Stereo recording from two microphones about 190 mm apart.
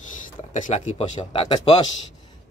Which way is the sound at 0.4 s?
40° left (ahead or behind).